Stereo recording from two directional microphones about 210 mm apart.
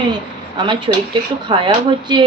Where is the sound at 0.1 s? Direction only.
20° right (ahead or behind).